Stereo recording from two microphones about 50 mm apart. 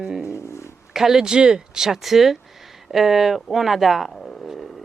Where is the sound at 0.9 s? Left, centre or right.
Centre.